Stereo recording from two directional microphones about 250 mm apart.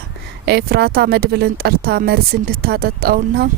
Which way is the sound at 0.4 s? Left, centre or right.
Right.